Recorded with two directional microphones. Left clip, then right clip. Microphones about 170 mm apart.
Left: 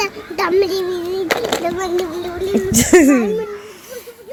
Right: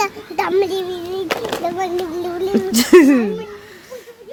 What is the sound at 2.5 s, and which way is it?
Speech, 20° right (ahead or behind).